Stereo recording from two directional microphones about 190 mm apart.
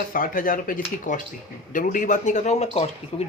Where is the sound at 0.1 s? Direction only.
45° left (ahead or behind).